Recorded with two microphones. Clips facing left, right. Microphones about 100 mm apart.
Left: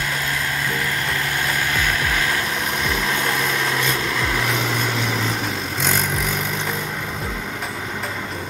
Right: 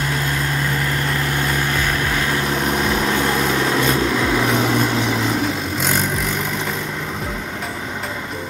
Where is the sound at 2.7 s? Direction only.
30° right (ahead or behind).